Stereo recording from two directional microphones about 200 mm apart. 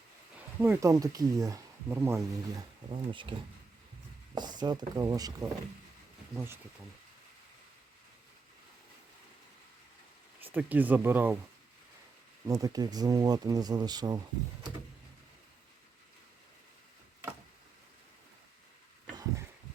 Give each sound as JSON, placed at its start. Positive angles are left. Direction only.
{"t": 0.6, "sound": "speech", "side_deg": -15}
{"t": 2.9, "sound": "speech", "side_deg": -25}
{"t": 4.4, "sound": "speech", "side_deg": -20}
{"t": 10.4, "sound": "speech", "side_deg": -10}
{"t": 12.5, "sound": "speech", "side_deg": -20}
{"t": 19.1, "sound": "a sound", "side_deg": -15}